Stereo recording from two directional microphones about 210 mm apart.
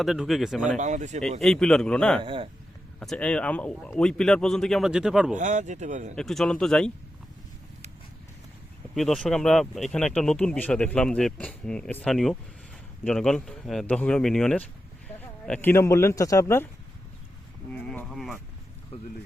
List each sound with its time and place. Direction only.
0.0 s speech: centre (ahead or behind)
0.8 s speech: 35° right (ahead or behind)
1.4 s speech: centre (ahead or behind)
2.2 s speech: 25° right (ahead or behind)
3.0 s speech: 5° left (ahead or behind)
5.4 s speech: 35° right (ahead or behind)
6.1 s speech: centre (ahead or behind)
9.0 s speech: centre (ahead or behind)
17.7 s a sound: 5° left (ahead or behind)